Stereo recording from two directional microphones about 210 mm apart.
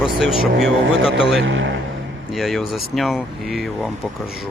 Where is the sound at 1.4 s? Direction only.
65° right (ahead or behind).